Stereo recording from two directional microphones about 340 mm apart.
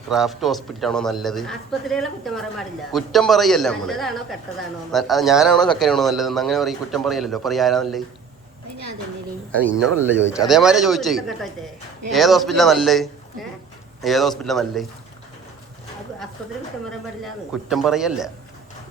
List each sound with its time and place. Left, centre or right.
0.1 s a man's voice: centre
9.8 s a man's voice: centre
17.7 s a man's voice: centre